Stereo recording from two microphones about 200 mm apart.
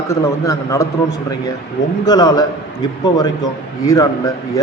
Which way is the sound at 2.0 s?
20° left (ahead or behind).